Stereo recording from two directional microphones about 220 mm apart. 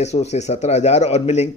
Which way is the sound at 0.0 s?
30° left (ahead or behind).